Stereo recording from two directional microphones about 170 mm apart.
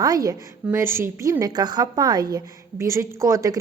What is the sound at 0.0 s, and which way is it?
A woman's voice, 20° right (ahead or behind).